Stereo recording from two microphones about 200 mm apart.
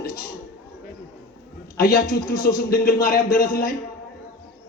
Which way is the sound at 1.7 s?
50° left (ahead or behind).